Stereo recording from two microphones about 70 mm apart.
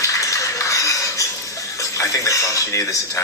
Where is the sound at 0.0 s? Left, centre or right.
Left.